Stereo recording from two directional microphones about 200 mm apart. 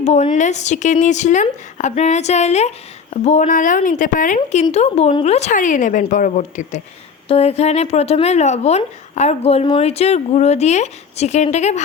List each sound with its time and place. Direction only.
0.0 s a woman's voice: 35° left (ahead or behind)
4.4 s a woman's voice: 30° left (ahead or behind)